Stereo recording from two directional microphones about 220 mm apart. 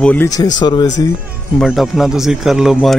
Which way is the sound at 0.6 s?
20° left (ahead or behind).